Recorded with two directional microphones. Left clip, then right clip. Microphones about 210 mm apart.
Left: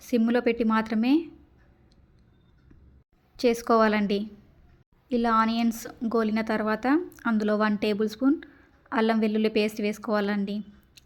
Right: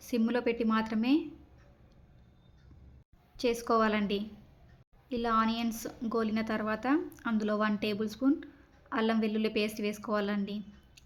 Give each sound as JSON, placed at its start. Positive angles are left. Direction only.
{"t": 0.0, "sound": "a woman's voice", "side_deg": 20}
{"t": 3.3, "sound": "a woman's voice", "side_deg": 25}